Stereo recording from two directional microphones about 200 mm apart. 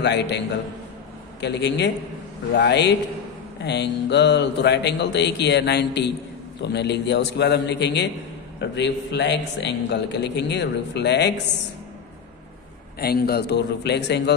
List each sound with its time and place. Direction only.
0.0 s a man's voice: 60° left (ahead or behind)
1.4 s a man's voice: 60° left (ahead or behind)
13.0 s a man's voice: 50° left (ahead or behind)